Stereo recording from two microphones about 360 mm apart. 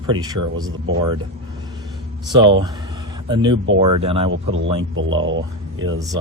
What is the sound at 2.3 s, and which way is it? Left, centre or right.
Speech, centre.